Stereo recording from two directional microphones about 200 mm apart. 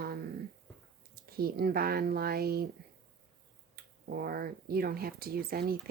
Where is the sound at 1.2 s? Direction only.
50° right (ahead or behind).